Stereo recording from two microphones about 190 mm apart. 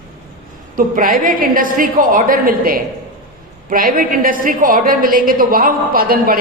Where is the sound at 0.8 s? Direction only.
45° right (ahead or behind).